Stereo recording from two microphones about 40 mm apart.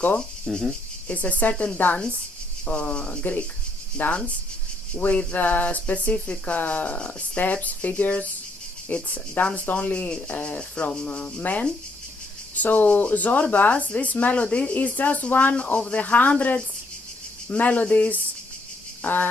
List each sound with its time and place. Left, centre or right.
0.2 s speech: centre
1.1 s speech: left
4.0 s speech: left
6.4 s speech: left
14.3 s speech: left
15.6 s speech: left
19.0 s speech: left